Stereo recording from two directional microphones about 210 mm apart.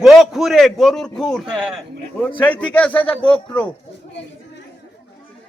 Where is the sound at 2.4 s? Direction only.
5° left (ahead or behind).